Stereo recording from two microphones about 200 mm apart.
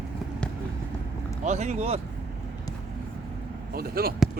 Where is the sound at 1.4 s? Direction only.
35° right (ahead or behind).